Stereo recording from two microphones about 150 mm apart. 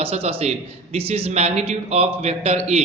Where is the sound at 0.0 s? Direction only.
40° right (ahead or behind).